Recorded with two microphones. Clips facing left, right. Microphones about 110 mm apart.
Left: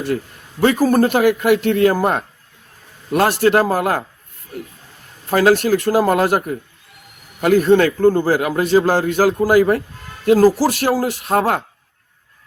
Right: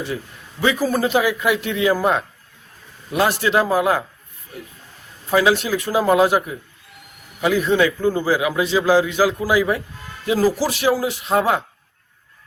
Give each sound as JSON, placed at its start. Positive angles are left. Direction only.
{"t": 0.6, "sound": "a man's voice", "side_deg": 50}
{"t": 5.3, "sound": "a man's voice", "side_deg": 55}